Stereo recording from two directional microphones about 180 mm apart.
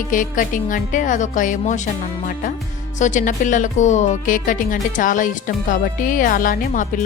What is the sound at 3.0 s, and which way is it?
Speech, 45° left (ahead or behind).